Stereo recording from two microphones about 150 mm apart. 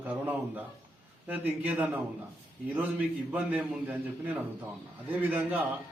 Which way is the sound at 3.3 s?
10° right (ahead or behind).